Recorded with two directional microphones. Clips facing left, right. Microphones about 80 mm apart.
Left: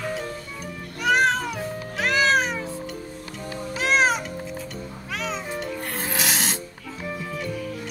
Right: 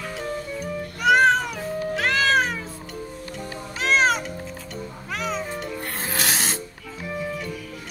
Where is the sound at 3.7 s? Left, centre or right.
Centre.